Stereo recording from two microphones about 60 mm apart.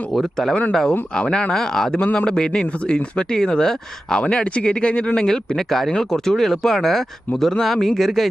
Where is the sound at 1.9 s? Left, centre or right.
Centre.